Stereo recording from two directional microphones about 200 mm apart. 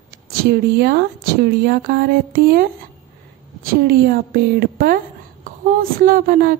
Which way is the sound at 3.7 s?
50° right (ahead or behind).